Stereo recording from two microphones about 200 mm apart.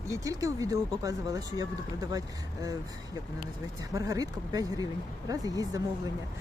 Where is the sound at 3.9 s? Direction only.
15° right (ahead or behind).